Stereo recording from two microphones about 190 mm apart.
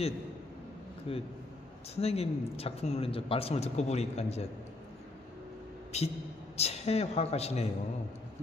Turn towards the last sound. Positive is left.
turn(degrees=35)  # may be behind; listen again after turning